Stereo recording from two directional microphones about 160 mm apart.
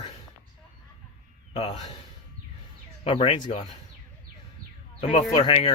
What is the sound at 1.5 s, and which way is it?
Speech, 40° left (ahead or behind).